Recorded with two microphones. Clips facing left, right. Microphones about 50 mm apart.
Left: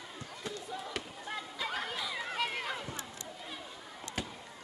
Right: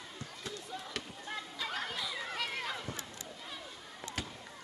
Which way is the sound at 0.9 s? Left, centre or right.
Centre.